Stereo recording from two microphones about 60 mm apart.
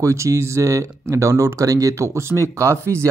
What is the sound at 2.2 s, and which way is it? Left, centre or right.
Speech, right.